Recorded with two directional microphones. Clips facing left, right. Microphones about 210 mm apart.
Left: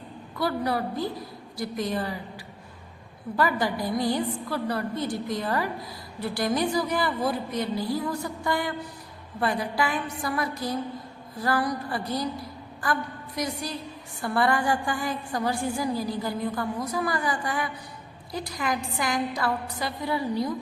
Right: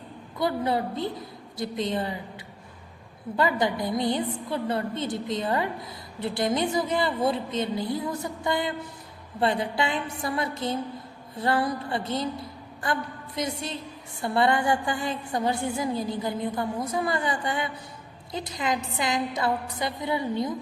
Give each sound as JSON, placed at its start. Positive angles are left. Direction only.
{"t": 0.3, "sound": "a woman's voice", "side_deg": -20}
{"t": 3.3, "sound": "a woman's voice", "side_deg": -20}